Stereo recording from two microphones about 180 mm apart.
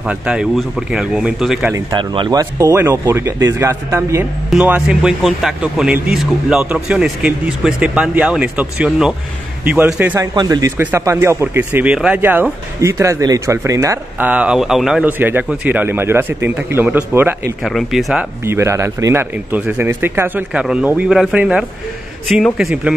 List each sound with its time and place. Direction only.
0.0 s a man's voice: 5° right (ahead or behind)
1.9 s a man's voice: 25° right (ahead or behind); by 10.2 s 10° right (ahead or behind)
10.3 s speech: 20° right (ahead or behind)
17.6 s a man's voice: centre (ahead or behind)
18.4 s a man's voice: 15° right (ahead or behind)